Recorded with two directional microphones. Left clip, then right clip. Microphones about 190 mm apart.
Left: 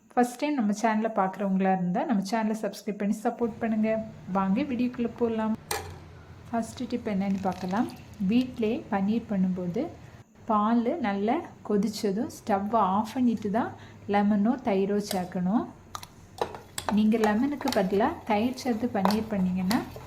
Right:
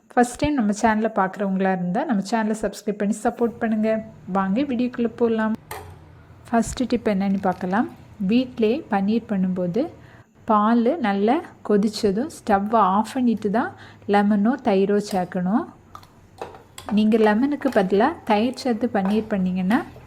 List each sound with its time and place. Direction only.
0.3 s a woman's voice: 25° right (ahead or behind)
6.5 s a woman's voice: 35° right (ahead or behind)
7.3 s a woman's voice: 15° right (ahead or behind)
16.9 s a woman's voice: 25° right (ahead or behind)